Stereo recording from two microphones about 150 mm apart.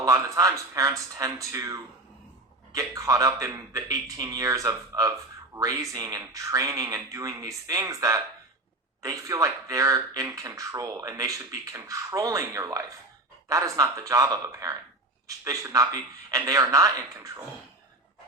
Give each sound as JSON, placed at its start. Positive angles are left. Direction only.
{"t": 0.0, "sound": "speech", "side_deg": -20}